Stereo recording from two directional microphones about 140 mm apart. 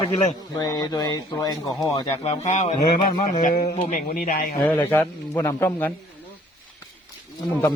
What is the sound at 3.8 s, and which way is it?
Speech, 70° left (ahead or behind).